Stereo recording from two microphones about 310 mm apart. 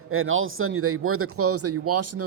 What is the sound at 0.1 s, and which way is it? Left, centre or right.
Speech, right.